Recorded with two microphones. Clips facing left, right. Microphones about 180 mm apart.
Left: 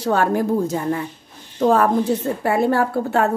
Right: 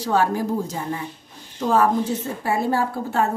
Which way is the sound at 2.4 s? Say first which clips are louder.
Left 4 dB; 60° left (ahead or behind).